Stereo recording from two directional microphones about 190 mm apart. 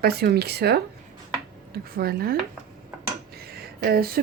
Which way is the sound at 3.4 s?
55° right (ahead or behind).